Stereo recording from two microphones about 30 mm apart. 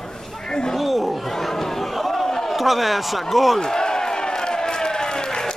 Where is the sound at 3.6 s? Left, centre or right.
Left.